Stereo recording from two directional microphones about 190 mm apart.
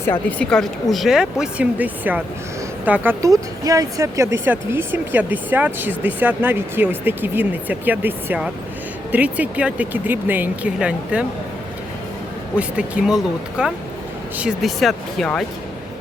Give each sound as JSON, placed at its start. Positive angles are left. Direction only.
{"t": 0.0, "sound": "speech", "side_deg": 10}
{"t": 12.5, "sound": "speech", "side_deg": -5}